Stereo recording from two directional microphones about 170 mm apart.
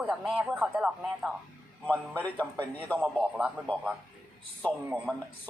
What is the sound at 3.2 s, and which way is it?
Speech, 5° right (ahead or behind).